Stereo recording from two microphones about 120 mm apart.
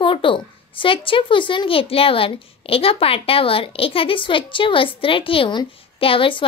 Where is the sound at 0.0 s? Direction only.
45° left (ahead or behind).